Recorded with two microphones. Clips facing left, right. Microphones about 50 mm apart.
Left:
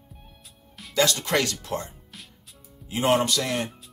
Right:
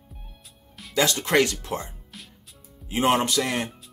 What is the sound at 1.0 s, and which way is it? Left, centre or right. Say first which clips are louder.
Speech: right 2 dB; right.